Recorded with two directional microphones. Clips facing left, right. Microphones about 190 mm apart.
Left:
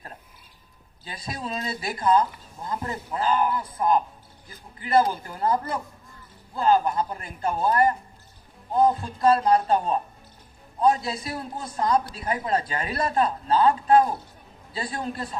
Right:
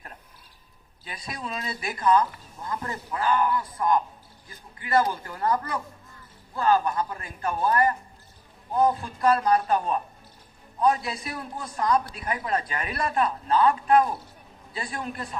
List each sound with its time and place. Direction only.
1.0 s a man's voice: 25° left (ahead or behind)